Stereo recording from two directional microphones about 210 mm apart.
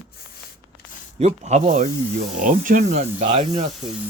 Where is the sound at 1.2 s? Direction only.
30° right (ahead or behind).